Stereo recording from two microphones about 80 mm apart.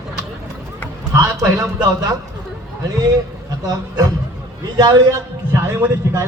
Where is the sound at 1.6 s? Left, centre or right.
Right.